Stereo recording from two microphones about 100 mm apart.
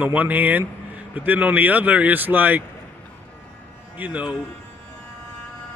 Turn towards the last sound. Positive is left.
turn(degrees=-10)  # may be behind; listen again after turning